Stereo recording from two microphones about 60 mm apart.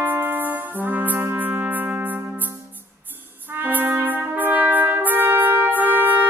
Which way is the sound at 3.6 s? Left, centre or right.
Right.